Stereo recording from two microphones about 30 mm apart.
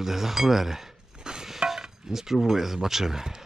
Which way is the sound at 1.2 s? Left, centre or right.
Right.